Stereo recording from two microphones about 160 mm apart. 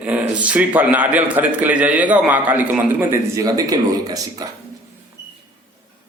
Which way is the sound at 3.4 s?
25° right (ahead or behind).